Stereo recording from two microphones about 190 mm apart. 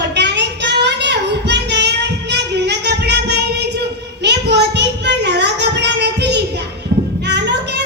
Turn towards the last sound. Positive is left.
turn(degrees=-65)  # may be behind; listen again after turning